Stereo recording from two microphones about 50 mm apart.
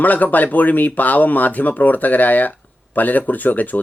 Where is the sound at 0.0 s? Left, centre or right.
Left.